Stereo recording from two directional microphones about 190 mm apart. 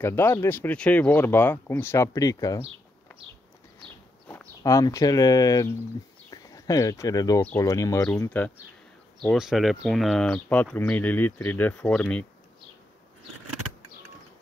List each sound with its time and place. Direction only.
0.0 s speech: 10° left (ahead or behind)
4.3 s speech: 15° left (ahead or behind)